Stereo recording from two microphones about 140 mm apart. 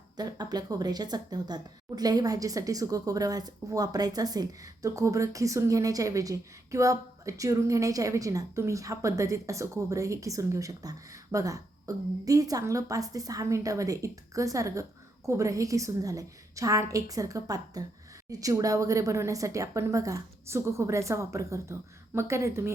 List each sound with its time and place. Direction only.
0.2 s a woman's voice: 30° right (ahead or behind)